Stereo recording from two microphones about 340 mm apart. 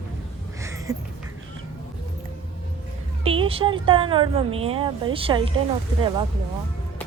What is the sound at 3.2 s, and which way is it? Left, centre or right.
Speech, centre.